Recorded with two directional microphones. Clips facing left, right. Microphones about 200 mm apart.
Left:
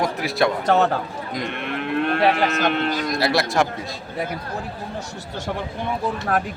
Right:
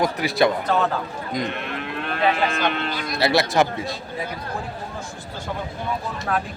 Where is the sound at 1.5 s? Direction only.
55° left (ahead or behind).